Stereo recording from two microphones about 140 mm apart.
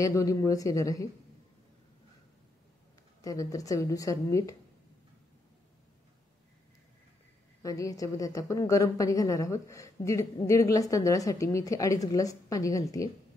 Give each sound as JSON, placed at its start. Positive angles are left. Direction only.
{"t": 0.0, "sound": "speech", "side_deg": 25}
{"t": 3.2, "sound": "speech", "side_deg": 25}
{"t": 7.6, "sound": "speech", "side_deg": 25}